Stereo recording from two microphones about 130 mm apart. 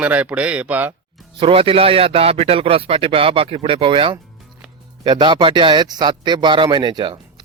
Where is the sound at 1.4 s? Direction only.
45° right (ahead or behind).